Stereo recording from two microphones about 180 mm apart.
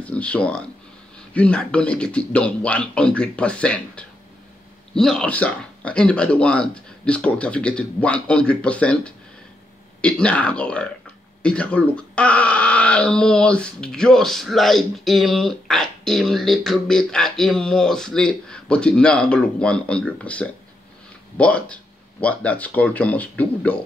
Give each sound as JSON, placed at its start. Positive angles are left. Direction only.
{"t": 0.0, "sound": "speech", "side_deg": 5}